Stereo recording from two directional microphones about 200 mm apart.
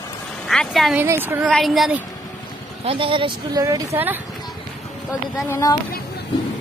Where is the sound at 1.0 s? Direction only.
10° right (ahead or behind).